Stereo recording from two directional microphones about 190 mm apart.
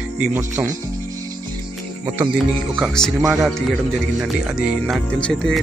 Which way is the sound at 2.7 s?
Centre (ahead or behind).